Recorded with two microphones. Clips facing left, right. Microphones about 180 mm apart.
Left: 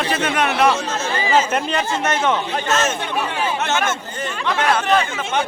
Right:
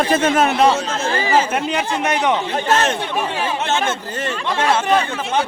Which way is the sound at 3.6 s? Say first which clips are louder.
Right 2 dB; 30° right (ahead or behind).